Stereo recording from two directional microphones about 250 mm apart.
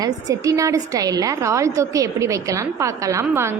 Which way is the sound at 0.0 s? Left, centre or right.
Centre.